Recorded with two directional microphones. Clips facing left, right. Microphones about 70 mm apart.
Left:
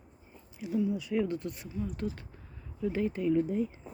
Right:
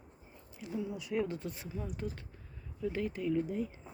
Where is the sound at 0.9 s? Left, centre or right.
Centre.